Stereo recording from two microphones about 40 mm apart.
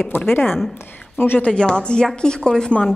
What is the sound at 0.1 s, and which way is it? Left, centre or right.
Speech, left.